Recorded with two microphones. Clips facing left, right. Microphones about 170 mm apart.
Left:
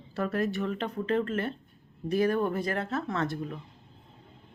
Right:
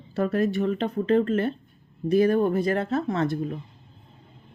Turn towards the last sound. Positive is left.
turn(degrees=-15)  # may be behind; listen again after turning